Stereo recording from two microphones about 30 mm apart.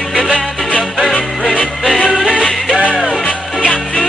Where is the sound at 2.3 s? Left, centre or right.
Left.